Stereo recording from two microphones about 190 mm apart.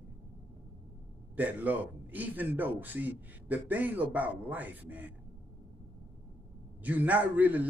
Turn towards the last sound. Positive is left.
turn(degrees=-10)  # may be behind; listen again after turning